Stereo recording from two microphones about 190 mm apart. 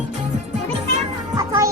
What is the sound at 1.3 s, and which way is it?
Music, 15° right (ahead or behind).